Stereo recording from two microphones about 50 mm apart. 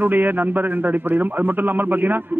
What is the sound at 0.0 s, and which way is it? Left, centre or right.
A man's voice, right.